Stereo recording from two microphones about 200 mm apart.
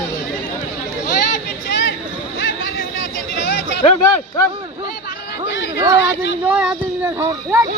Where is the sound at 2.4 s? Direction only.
70° left (ahead or behind).